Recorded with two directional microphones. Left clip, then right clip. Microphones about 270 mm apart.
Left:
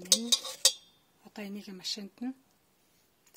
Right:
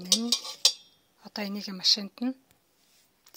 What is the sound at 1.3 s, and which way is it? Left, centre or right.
Speech, centre.